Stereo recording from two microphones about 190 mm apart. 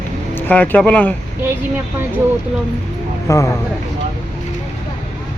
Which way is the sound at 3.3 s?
15° left (ahead or behind).